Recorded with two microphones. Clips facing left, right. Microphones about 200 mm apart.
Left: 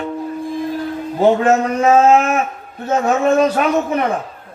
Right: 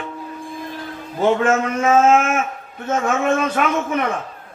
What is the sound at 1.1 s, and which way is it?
Speech, 35° left (ahead or behind).